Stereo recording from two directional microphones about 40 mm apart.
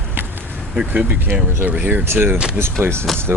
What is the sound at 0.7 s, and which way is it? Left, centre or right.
Speech, right.